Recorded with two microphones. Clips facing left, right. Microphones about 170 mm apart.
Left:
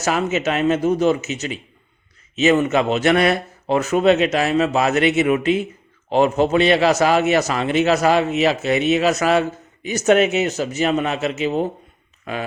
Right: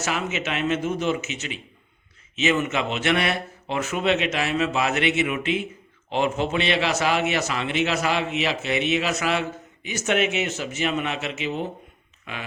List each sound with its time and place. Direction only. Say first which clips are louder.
0.0 s a man's voice: left 7 dB; 40° left (ahead or behind)